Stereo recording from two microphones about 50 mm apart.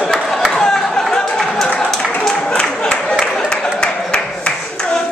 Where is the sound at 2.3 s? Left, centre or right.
Centre.